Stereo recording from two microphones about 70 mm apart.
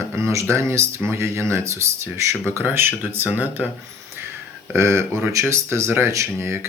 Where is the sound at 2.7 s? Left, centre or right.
Right.